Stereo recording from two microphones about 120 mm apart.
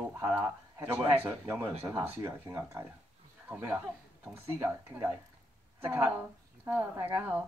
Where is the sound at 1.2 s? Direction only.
15° right (ahead or behind).